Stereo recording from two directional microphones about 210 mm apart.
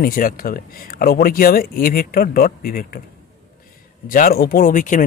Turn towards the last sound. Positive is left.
turn(degrees=40)  # may be behind; listen again after turning